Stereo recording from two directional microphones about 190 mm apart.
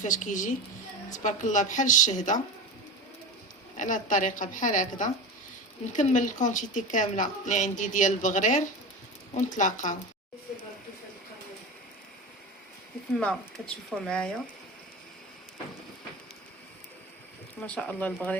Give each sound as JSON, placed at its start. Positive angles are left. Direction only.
{"t": 0.0, "sound": "a woman's voice", "side_deg": 40}
{"t": 3.8, "sound": "a woman's voice", "side_deg": 40}
{"t": 13.1, "sound": "speech", "side_deg": 5}
{"t": 17.6, "sound": "speech", "side_deg": 5}